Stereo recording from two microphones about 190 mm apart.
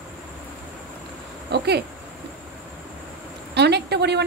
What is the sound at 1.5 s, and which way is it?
Speech, 60° right (ahead or behind).